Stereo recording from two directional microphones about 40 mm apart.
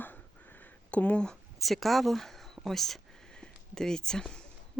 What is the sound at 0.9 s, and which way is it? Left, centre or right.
Speech, left.